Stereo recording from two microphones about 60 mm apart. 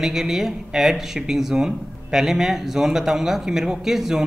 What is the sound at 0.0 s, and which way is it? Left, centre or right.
Speech, centre.